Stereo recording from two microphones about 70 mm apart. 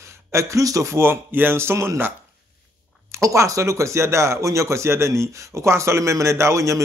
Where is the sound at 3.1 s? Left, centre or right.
Right.